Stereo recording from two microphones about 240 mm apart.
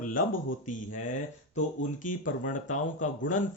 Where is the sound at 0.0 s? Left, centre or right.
Left.